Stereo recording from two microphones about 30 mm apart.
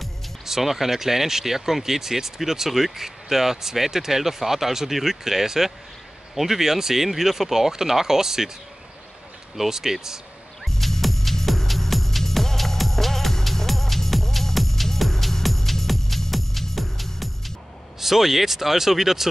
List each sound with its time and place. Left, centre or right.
0.5 s speech: centre
9.7 s speech: centre
10.6 s music: centre
18.0 s speech: centre